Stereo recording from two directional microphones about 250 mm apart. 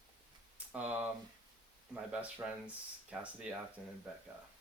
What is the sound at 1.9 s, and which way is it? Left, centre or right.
Speech, centre.